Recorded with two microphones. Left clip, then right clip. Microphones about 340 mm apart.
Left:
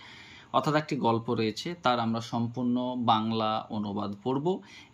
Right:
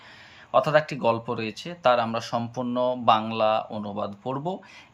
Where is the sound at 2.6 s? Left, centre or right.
Right.